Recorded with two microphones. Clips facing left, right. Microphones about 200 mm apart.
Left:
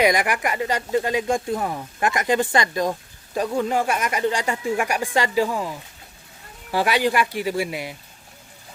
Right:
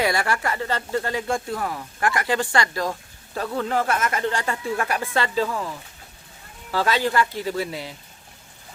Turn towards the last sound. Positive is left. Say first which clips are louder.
# left 2 dB
turn(degrees=15)  # may be behind; listen again after turning